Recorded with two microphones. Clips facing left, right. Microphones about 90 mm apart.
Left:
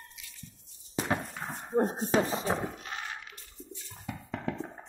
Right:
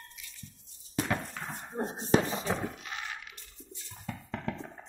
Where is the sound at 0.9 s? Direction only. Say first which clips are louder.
Left 1 dB; 20° left (ahead or behind).